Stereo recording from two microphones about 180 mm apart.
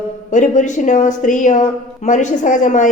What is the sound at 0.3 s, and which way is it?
A woman's voice, 45° left (ahead or behind).